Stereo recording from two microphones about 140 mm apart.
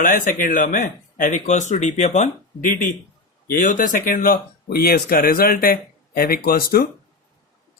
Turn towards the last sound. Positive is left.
turn(degrees=90)